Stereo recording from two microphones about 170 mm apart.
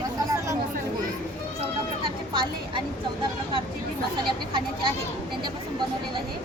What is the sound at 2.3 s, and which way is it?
Speech, 30° right (ahead or behind).